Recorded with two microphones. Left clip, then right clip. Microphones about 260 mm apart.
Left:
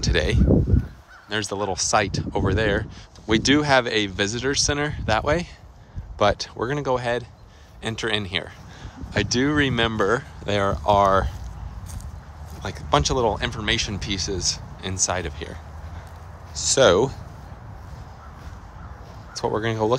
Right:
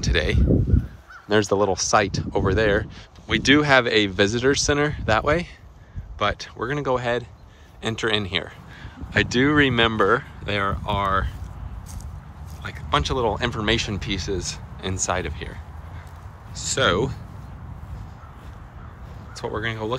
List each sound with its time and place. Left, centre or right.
0.0 s speech: centre
12.6 s speech: centre
19.3 s speech: centre